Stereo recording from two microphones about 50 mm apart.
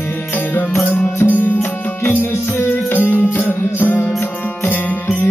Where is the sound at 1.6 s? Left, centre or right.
Left.